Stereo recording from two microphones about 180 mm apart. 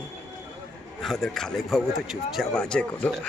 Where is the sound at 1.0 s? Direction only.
Centre (ahead or behind).